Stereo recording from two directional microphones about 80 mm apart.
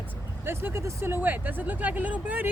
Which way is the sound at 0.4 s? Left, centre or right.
Right.